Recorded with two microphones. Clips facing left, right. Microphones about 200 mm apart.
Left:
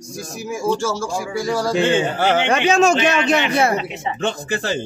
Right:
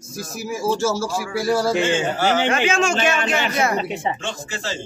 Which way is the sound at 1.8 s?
55° left (ahead or behind).